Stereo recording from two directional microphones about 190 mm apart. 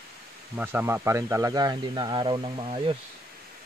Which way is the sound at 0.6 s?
10° right (ahead or behind).